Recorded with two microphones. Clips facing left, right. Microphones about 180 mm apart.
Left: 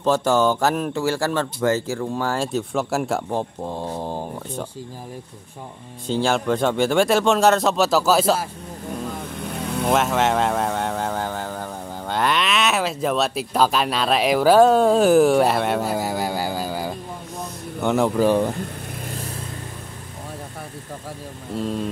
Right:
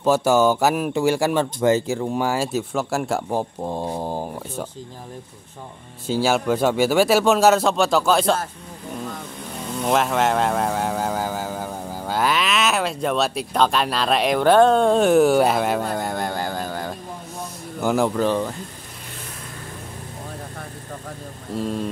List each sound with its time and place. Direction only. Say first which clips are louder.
0.0 s speech: right 1 dB; 10° right (ahead or behind)
2.3 s speech: even; 5° right (ahead or behind)
3.3 s speech: right 1 dB; 10° right (ahead or behind)
6.0 s speech: right 1 dB; 5° right (ahead or behind)
9.8 s speech: even; centre (ahead or behind)
18.2 s speech: left 3 dB; 15° left (ahead or behind)
21.5 s speech: even; centre (ahead or behind)